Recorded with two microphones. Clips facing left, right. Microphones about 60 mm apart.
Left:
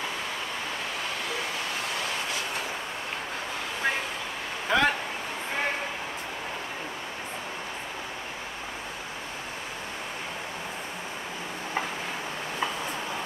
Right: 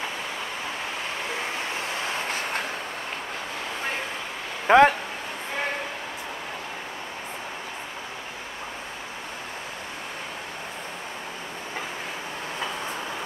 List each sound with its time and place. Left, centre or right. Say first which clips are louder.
4.6 s speech: right 8 dB; right